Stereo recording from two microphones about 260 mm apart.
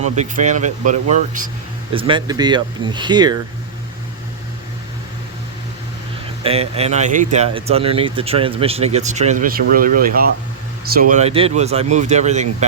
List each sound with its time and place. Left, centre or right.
0.0 s speech: right
6.4 s speech: right